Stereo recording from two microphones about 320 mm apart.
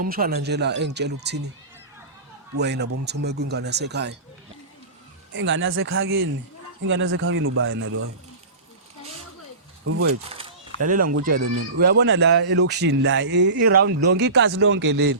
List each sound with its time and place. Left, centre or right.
0.0 s speech: right
2.6 s speech: right
5.3 s speech: right
10.2 s a sound: right
11.1 s speech: right
11.8 s speech: right